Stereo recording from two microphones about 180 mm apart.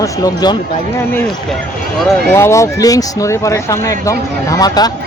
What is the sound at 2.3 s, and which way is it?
Speech, 15° left (ahead or behind).